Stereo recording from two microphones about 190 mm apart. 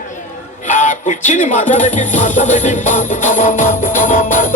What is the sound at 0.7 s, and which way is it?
Music, 40° left (ahead or behind).